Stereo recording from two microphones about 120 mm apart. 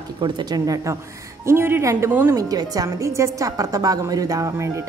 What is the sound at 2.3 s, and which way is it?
Speech, 30° right (ahead or behind).